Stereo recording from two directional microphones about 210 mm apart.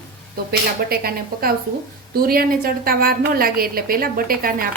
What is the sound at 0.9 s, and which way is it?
A woman's voice, 45° right (ahead or behind).